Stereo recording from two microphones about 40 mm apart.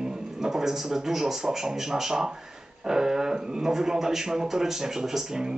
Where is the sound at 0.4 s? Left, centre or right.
Centre.